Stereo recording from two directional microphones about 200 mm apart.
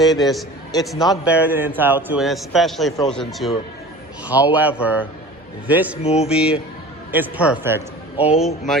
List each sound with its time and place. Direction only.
0.0 s a man's voice: centre (ahead or behind)
0.9 s a man's voice: 20° left (ahead or behind)
1.2 s a man's voice: 10° right (ahead or behind)
6.0 s speech: 30° left (ahead or behind)
6.2 s a man's voice: 5° right (ahead or behind)